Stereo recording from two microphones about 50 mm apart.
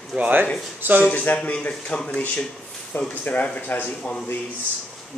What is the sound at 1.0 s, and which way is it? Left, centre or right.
Speech, left.